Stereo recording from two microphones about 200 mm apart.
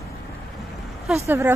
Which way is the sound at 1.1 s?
10° right (ahead or behind).